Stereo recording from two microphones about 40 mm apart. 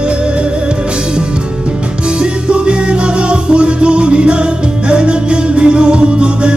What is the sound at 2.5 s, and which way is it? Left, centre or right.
Music, right.